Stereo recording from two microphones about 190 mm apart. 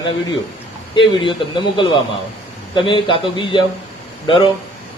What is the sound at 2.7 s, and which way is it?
Speech, 25° left (ahead or behind).